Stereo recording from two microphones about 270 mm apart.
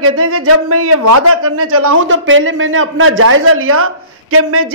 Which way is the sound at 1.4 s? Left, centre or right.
Right.